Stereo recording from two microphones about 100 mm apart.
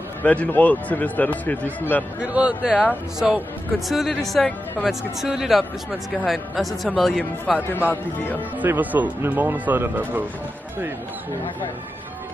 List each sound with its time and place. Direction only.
0.2 s a man's voice: 15° left (ahead or behind)
2.2 s speech: 10° right (ahead or behind)
7.6 s speech: 20° left (ahead or behind)
8.5 s speech: 15° right (ahead or behind)